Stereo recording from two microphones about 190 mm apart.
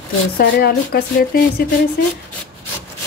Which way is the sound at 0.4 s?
55° left (ahead or behind).